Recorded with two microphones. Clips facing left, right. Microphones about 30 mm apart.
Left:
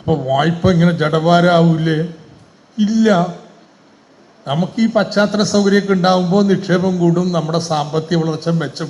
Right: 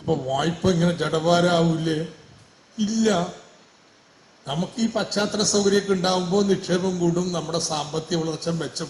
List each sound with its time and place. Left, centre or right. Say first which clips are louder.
0.0 s a man's voice: left 8 dB; left
4.4 s a man's voice: left 9 dB; left